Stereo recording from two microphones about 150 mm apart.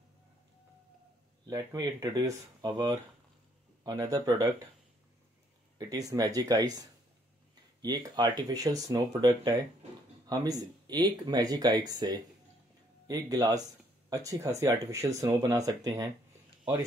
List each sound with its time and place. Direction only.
1.4 s speech: 25° right (ahead or behind)
5.8 s speech: 25° right (ahead or behind)